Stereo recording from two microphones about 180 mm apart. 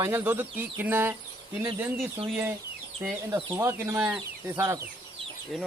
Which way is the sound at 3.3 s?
20° right (ahead or behind).